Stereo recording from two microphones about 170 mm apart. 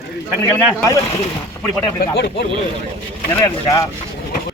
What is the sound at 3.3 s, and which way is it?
Speech, 20° left (ahead or behind).